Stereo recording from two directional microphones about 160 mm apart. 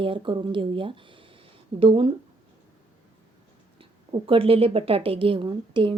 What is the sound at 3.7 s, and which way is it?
A woman's voice, 35° right (ahead or behind).